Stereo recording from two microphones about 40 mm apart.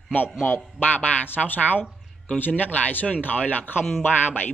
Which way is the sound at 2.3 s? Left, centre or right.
Left.